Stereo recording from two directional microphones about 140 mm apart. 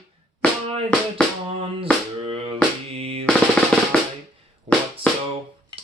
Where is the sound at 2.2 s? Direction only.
45° right (ahead or behind).